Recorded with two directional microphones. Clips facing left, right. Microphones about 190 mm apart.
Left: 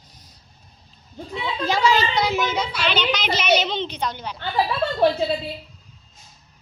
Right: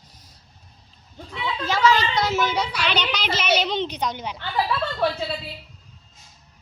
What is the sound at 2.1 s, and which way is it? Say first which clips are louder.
Speech: even; centre (ahead or behind).